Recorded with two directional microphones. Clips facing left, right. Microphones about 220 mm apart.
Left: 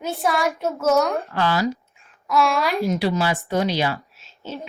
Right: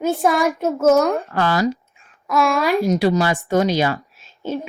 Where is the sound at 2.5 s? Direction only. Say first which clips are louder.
Right 5 dB; centre (ahead or behind).